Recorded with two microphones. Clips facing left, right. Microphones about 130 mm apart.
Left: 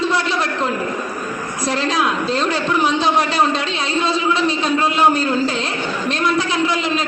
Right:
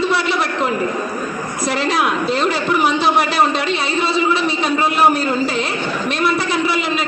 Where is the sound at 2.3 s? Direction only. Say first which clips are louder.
Right 1 dB; 10° right (ahead or behind).